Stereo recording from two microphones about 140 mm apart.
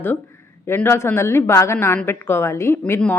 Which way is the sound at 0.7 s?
15° left (ahead or behind).